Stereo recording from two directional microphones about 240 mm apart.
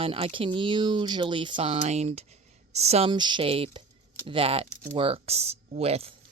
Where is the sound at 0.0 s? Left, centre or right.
Right.